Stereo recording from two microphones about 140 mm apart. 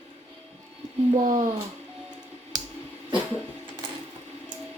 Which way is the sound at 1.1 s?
55° right (ahead or behind).